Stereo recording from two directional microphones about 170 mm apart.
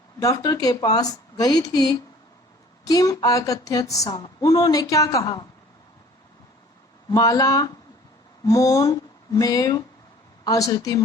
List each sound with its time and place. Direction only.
0.2 s speech: 20° left (ahead or behind)
7.1 s speech: 20° left (ahead or behind)